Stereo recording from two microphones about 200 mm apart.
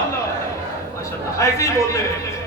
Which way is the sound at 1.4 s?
15° left (ahead or behind).